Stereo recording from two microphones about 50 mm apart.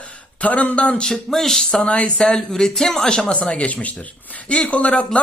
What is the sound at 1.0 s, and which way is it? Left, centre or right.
Speech, centre.